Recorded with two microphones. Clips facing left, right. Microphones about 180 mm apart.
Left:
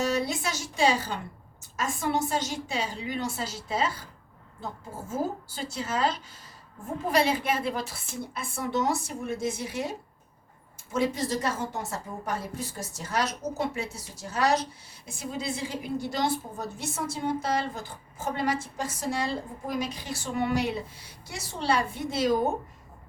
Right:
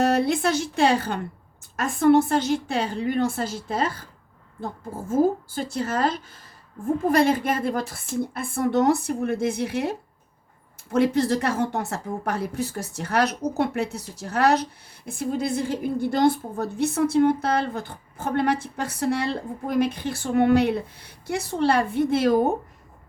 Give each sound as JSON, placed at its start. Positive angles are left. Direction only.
{"t": 0.0, "sound": "a woman's voice", "side_deg": -60}
{"t": 10.9, "sound": "a woman's voice", "side_deg": -65}